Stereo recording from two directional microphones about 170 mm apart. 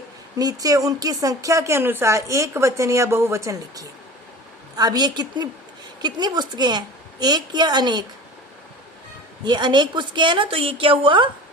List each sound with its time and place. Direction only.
0.3 s a woman's voice: 20° right (ahead or behind)
9.4 s a woman's voice: 25° right (ahead or behind)